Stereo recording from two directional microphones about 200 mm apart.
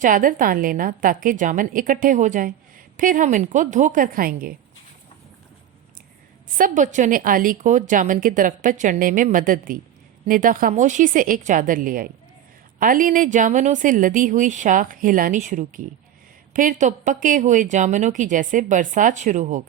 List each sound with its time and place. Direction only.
0.0 s a woman's voice: 45° right (ahead or behind)
6.6 s a woman's voice: 40° right (ahead or behind)